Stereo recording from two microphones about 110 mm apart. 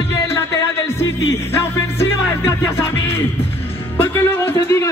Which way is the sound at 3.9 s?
20° left (ahead or behind).